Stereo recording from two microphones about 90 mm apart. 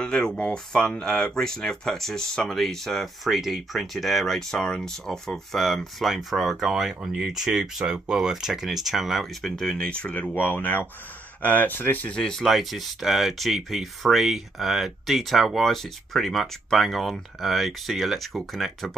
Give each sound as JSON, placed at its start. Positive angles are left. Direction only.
{"t": 0.0, "sound": "speech", "side_deg": 10}
{"t": 12.2, "sound": "speech", "side_deg": 5}